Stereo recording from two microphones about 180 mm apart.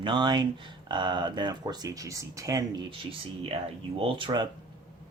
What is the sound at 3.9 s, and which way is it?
Speech, 30° right (ahead or behind).